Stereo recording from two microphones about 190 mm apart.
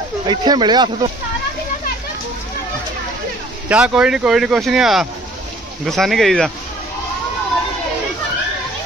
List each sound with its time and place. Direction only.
0.3 s speech: 25° right (ahead or behind)
3.6 s speech: 5° right (ahead or behind)